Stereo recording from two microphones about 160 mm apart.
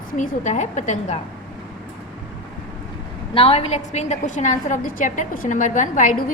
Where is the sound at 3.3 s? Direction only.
40° left (ahead or behind).